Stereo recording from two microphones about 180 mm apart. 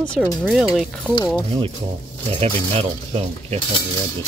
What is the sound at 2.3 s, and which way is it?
Speech, 35° right (ahead or behind).